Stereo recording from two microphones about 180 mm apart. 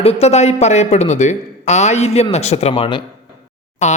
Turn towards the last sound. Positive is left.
turn(degrees=40)  # may be behind; listen again after turning